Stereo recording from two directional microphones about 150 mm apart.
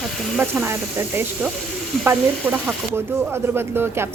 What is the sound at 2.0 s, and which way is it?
Speech, 10° right (ahead or behind).